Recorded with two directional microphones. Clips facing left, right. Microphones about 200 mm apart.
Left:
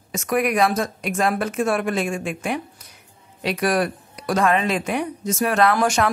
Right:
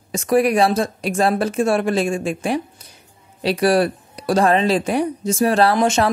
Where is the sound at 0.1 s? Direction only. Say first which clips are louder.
Right 5 dB; 30° right (ahead or behind).